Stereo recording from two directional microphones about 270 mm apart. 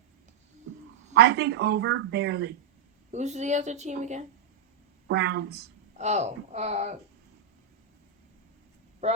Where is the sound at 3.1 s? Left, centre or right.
Right.